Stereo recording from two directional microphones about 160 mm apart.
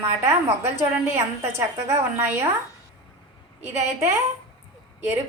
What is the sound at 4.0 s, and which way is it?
Speech, 15° right (ahead or behind).